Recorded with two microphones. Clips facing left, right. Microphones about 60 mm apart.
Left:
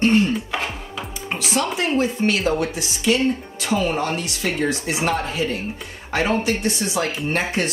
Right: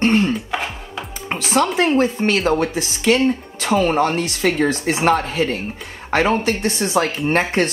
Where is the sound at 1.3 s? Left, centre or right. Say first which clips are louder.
Right 5 dB; right.